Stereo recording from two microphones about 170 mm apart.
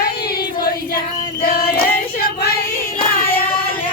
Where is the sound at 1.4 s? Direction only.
60° left (ahead or behind).